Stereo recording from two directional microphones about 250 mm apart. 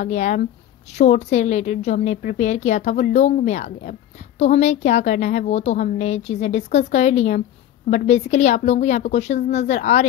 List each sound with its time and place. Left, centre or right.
0.0 s a woman's voice: left